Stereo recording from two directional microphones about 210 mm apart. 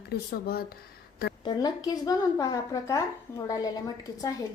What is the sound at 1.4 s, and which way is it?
A woman's voice, 20° left (ahead or behind).